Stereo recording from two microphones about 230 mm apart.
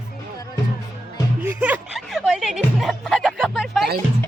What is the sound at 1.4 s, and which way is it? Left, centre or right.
Music, centre.